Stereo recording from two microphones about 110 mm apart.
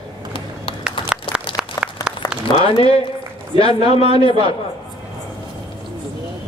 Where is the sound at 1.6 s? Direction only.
5° right (ahead or behind).